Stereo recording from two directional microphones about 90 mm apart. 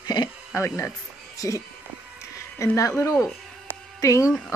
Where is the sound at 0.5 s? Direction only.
35° left (ahead or behind).